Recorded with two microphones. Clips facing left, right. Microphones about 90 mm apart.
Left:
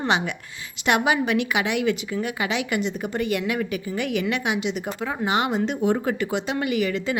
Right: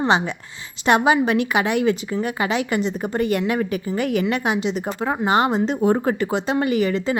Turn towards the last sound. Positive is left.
turn(degrees=-35)  # may be behind; listen again after turning